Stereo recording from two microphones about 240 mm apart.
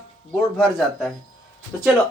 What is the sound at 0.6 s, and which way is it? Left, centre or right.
Speech, centre.